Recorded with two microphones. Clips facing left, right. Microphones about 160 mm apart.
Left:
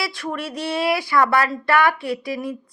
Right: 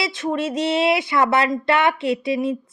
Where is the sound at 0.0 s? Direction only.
20° right (ahead or behind).